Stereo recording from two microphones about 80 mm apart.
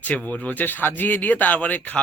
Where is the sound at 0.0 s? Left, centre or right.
Centre.